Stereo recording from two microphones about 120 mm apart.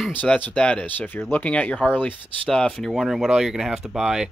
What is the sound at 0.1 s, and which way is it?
Speech, 15° left (ahead or behind).